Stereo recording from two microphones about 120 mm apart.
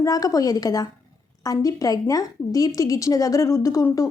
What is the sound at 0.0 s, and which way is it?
A woman's voice, 30° left (ahead or behind).